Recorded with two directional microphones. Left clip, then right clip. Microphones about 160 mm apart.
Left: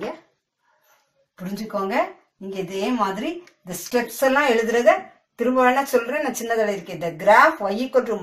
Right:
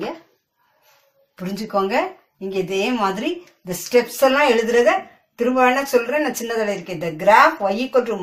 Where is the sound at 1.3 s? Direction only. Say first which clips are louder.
Right 6 dB; 20° right (ahead or behind).